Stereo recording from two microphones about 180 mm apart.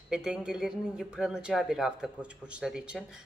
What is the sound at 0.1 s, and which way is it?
Speech, 5° right (ahead or behind).